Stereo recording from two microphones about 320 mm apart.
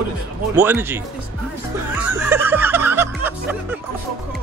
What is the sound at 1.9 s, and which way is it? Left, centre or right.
Music, centre.